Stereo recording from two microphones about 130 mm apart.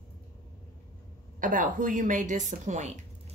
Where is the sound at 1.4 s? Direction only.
90° right; by 2.9 s 65° right (ahead or behind).